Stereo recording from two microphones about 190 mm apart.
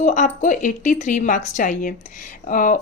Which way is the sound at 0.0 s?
40° left (ahead or behind).